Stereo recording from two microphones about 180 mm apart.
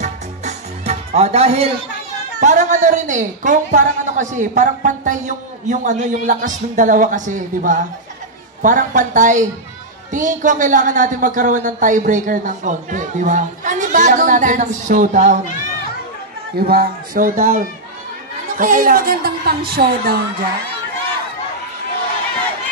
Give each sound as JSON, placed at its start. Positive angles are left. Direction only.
{"t": 0.0, "sound": "music", "side_deg": -40}
{"t": 2.4, "sound": "speech", "side_deg": -45}
{"t": 16.5, "sound": "a woman's voice", "side_deg": -60}